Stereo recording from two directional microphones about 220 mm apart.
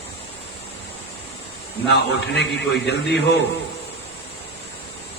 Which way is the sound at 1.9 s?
50° left (ahead or behind).